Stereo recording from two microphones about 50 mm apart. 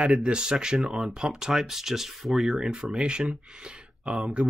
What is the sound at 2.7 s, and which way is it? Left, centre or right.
Speech, centre.